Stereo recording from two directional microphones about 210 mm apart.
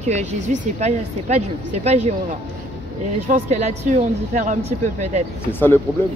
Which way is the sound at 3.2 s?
35° right (ahead or behind).